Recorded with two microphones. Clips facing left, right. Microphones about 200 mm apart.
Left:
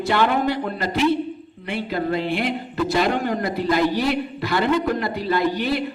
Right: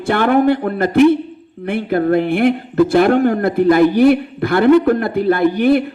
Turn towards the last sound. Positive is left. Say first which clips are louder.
# right 8 dB
turn(degrees=-55)  # may be behind; listen again after turning